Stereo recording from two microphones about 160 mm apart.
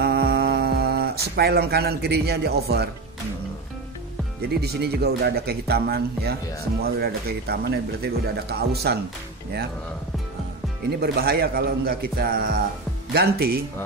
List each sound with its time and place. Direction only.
0.0 s a sound: 75° right (ahead or behind)
4.4 s speech: 80° right
10.9 s speech: 85° right